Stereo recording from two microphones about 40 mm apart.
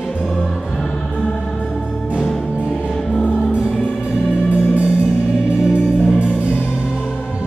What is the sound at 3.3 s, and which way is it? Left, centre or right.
Music, right.